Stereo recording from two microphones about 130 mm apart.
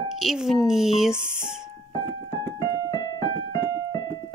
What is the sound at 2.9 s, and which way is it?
Keyboard, 35° left (ahead or behind).